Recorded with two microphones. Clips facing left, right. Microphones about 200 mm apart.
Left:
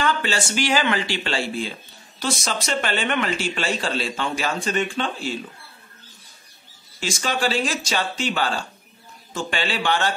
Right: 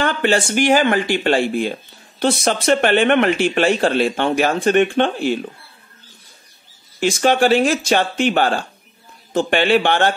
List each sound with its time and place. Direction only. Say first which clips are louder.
0.0 s speech: right 6 dB; 55° right (ahead or behind)
7.0 s speech: right 10 dB; 55° right (ahead or behind)